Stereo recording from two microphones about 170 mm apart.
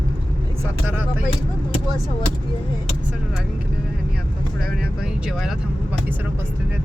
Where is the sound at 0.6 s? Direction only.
15° right (ahead or behind).